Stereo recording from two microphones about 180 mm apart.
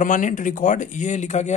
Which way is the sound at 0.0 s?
45° left (ahead or behind).